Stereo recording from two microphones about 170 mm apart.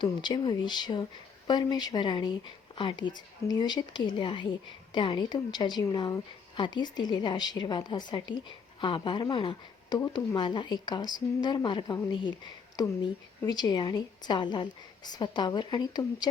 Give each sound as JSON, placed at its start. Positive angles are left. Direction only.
{"t": 0.0, "sound": "a woman's voice", "side_deg": 25}